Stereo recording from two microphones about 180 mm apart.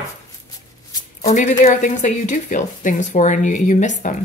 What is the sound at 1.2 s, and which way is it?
A woman's voice, 40° left (ahead or behind).